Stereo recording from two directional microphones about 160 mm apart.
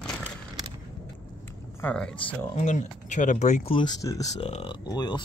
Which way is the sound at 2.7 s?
50° left (ahead or behind).